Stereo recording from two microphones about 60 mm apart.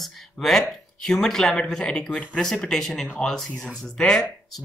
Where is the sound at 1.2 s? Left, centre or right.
Centre.